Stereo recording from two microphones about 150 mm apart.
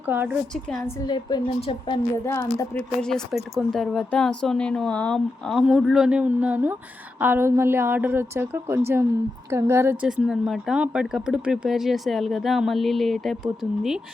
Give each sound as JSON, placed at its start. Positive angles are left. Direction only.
{"t": 0.0, "sound": "a woman's voice", "side_deg": -10}
{"t": 1.0, "sound": "speech", "side_deg": 30}
{"t": 2.7, "sound": "a woman's voice", "side_deg": 5}
{"t": 10.1, "sound": "speech", "side_deg": -5}